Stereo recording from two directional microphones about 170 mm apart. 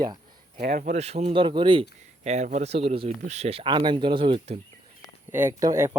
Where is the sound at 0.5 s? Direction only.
50° right (ahead or behind); by 4.5 s 30° right (ahead or behind).